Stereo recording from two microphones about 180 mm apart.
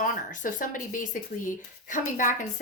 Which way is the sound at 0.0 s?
50° left (ahead or behind).